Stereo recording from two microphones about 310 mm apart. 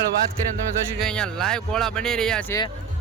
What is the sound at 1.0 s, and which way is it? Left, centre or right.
Speech, centre.